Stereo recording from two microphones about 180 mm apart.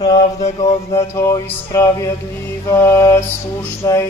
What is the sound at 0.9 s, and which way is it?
Music, 15° left (ahead or behind).